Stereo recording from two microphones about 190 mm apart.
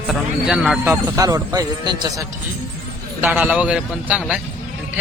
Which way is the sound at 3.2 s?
10° right (ahead or behind).